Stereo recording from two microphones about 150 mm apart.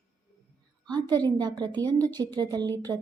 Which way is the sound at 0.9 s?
30° right (ahead or behind).